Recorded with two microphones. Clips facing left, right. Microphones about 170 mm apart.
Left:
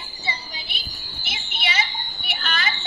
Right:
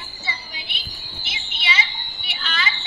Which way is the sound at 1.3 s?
45° left (ahead or behind).